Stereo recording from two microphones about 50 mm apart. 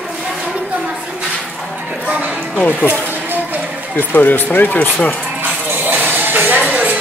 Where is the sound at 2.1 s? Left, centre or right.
Right.